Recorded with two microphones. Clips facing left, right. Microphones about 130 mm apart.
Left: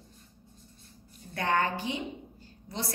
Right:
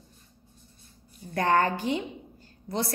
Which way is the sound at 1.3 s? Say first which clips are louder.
Right 5 dB; 45° right (ahead or behind).